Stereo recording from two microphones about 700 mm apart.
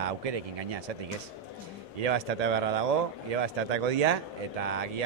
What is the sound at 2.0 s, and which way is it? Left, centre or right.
Speech, right.